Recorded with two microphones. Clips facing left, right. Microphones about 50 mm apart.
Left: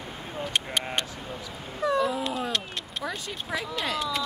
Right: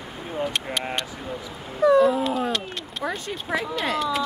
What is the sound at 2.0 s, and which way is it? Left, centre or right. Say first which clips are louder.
Cat: right 6 dB; right.